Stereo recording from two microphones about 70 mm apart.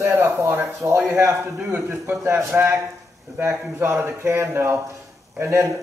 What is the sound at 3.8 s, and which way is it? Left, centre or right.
Speech, right.